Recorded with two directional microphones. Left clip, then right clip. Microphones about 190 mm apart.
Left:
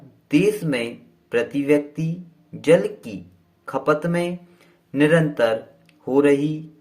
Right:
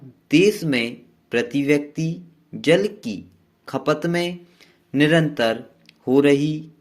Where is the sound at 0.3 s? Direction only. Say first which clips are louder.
Right 2 dB; 50° right (ahead or behind).